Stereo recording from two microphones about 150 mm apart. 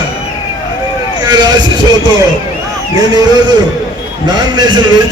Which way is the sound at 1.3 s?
30° right (ahead or behind).